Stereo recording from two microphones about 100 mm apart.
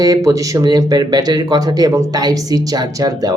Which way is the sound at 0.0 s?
35° right (ahead or behind).